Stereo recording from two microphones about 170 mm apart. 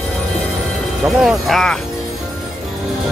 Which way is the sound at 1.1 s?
Centre (ahead or behind).